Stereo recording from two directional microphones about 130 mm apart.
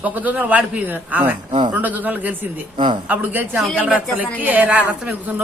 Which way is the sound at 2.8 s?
40° right (ahead or behind).